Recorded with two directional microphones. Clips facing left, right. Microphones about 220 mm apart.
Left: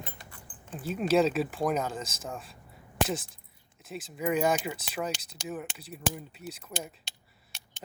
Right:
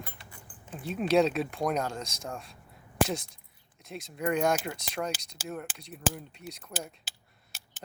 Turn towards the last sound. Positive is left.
turn(degrees=-5)  # may be behind; listen again after turning